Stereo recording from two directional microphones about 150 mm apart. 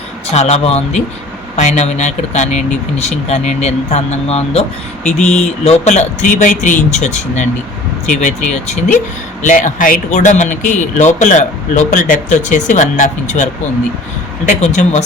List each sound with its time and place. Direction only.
0.3 s speech: 45° left (ahead or behind)
5.6 s speech: 45° left (ahead or behind)